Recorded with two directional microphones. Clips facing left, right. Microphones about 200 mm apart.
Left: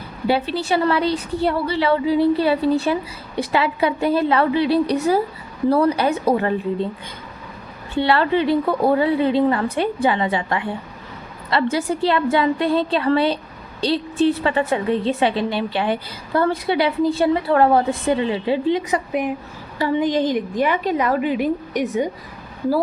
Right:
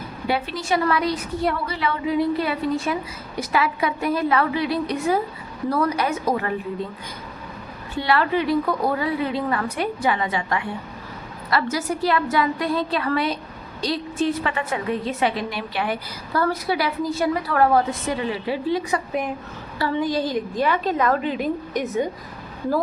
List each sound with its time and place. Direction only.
0.3 s a woman's voice: 30° left (ahead or behind)
7.9 s a woman's voice: 30° left (ahead or behind); by 21.8 s 10° left (ahead or behind)